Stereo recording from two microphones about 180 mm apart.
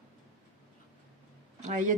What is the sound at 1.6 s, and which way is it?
Speech, 45° right (ahead or behind).